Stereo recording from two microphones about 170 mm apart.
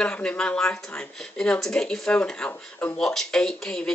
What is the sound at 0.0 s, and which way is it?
Speech, 5° left (ahead or behind).